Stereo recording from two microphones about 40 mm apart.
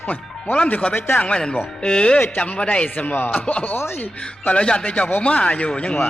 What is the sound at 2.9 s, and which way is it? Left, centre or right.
Speech, left.